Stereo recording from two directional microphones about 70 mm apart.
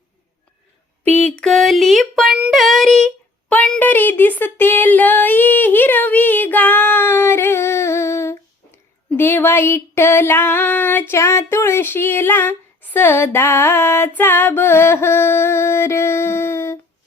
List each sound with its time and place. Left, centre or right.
1.4 s speech: centre
2.5 s child singing: centre
3.8 s a sound: left